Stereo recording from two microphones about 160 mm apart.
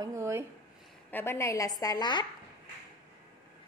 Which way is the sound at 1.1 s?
15° left (ahead or behind).